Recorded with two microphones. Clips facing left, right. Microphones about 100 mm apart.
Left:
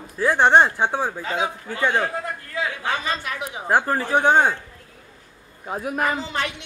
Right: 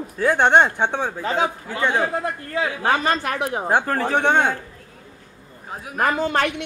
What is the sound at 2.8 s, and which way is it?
Speech, 55° right (ahead or behind).